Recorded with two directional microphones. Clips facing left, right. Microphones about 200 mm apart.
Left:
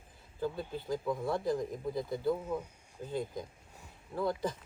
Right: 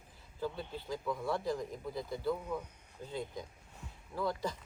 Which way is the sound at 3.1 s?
50° left (ahead or behind).